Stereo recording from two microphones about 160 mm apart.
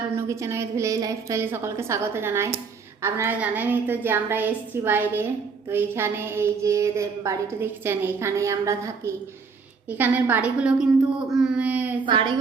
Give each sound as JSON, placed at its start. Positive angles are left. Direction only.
{"t": 0.2, "sound": "a woman's voice", "side_deg": -20}
{"t": 11.3, "sound": "a sound", "side_deg": -5}
{"t": 12.0, "sound": "a woman's voice", "side_deg": -30}